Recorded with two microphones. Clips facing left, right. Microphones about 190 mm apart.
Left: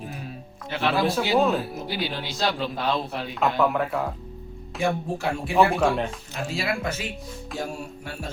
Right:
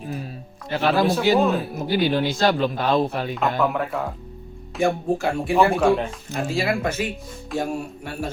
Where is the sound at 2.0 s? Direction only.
50° right (ahead or behind).